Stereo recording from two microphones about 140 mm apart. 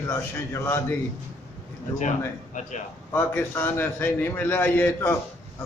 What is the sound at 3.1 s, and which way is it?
A man's voice, 15° left (ahead or behind).